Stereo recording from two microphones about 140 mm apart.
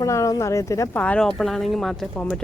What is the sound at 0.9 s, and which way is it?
Speech, 10° left (ahead or behind).